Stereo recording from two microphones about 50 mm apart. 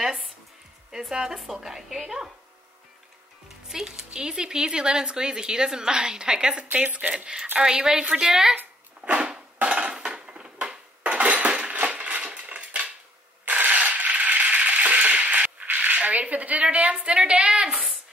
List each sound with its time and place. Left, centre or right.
0.0 s music: centre
1.1 s speech: centre
3.6 s speech: centre
9.0 s a sound: right
9.7 s dishes: centre
13.5 s a sound: right
16.0 s a woman's voice: right